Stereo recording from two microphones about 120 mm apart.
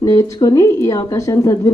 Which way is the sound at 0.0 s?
25° left (ahead or behind).